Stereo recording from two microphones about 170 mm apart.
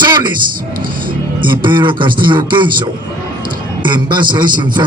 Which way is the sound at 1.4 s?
30° right (ahead or behind).